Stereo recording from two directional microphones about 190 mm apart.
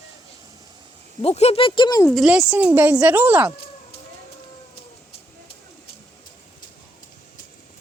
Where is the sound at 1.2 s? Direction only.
35° left (ahead or behind).